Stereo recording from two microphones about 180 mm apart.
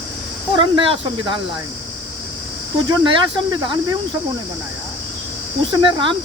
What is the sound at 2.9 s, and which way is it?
Speech, 25° right (ahead or behind).